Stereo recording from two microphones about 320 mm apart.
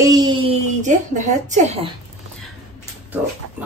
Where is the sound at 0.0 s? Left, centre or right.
Centre.